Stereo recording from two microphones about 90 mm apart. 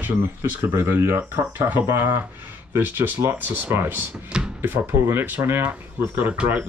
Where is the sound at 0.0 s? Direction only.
25° right (ahead or behind).